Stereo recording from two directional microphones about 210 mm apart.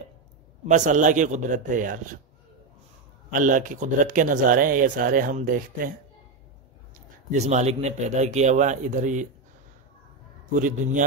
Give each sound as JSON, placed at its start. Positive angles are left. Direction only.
{"t": 0.7, "sound": "speech", "side_deg": -35}
{"t": 3.3, "sound": "speech", "side_deg": -40}
{"t": 7.2, "sound": "speech", "side_deg": -35}
{"t": 10.5, "sound": "speech", "side_deg": -40}